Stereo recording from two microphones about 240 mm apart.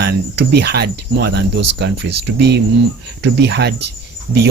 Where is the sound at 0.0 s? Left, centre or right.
Right.